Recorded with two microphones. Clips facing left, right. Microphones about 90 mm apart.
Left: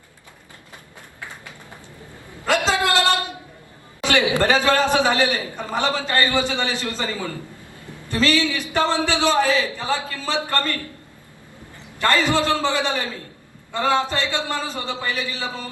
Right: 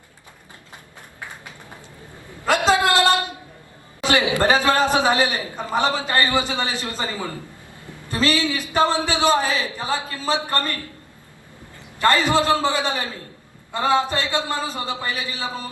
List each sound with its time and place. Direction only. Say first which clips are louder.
2.5 s a sound: right 2 dB; 20° right (ahead or behind)
4.4 s a man's voice: right 1 dB; 20° right (ahead or behind)
11.9 s a man's voice: right 1 dB; 20° right (ahead or behind)